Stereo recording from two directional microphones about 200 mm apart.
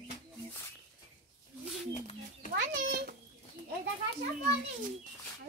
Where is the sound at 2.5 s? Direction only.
45° right (ahead or behind).